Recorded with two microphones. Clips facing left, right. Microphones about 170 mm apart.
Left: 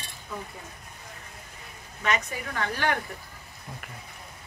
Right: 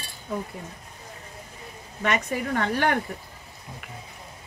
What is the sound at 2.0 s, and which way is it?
Speech, 65° right (ahead or behind).